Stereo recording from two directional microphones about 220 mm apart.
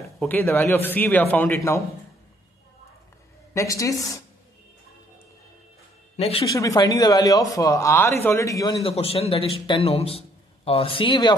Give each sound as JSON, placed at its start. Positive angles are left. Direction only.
{"t": 0.2, "sound": "speech", "side_deg": 10}
{"t": 3.5, "sound": "speech", "side_deg": 15}
{"t": 6.1, "sound": "speech", "side_deg": 25}
{"t": 6.4, "sound": "speech", "side_deg": 15}
{"t": 8.8, "sound": "a man's voice", "side_deg": 25}